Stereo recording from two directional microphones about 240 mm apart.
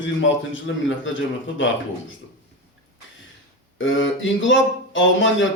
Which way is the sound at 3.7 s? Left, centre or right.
Left.